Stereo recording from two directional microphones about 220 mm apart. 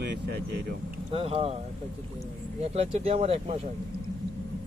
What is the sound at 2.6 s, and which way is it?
Speech, 30° right (ahead or behind).